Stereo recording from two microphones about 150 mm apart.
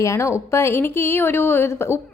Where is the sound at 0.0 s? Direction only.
20° left (ahead or behind).